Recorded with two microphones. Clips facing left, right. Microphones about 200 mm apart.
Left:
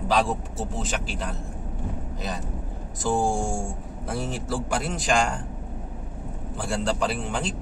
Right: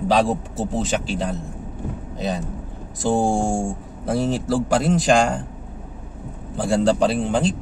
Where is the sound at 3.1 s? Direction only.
25° right (ahead or behind).